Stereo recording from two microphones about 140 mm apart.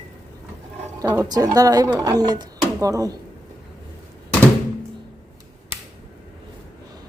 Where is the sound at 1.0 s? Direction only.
25° right (ahead or behind).